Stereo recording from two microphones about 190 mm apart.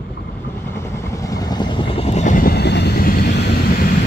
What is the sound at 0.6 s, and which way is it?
Vehicle, 15° left (ahead or behind).